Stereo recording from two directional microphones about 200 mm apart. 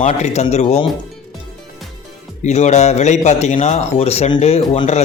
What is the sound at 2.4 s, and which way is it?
Speech, 35° left (ahead or behind).